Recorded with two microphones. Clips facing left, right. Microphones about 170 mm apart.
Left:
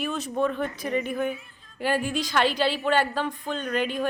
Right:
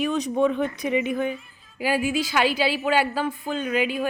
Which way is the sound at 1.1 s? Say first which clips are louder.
Right 2 dB; 5° left (ahead or behind).